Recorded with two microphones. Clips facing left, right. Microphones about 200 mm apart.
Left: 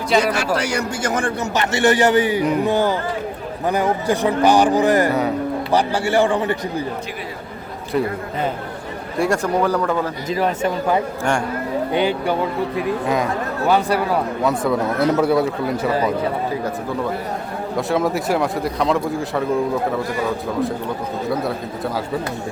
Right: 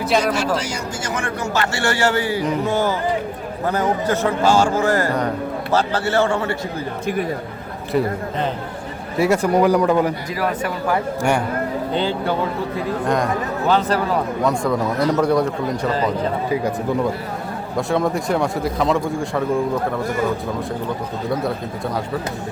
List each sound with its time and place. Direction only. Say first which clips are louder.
0.1 s a man's voice: left 2 dB; 5° left (ahead or behind)
0.5 s speech: left 3 dB; 65° left (ahead or behind)
1.5 s a man's voice: left 5 dB; 20° left (ahead or behind)
7.9 s a man's voice: right 1 dB; centre (ahead or behind)
9.1 s speech: right 3 dB; 5° right (ahead or behind)
10.2 s a man's voice: left 3 dB; 25° left (ahead or behind)
11.2 s speech: right 2 dB; 10° right (ahead or behind)
11.9 s a man's voice: left 3 dB; 15° left (ahead or behind)
17.7 s a man's voice: even; centre (ahead or behind)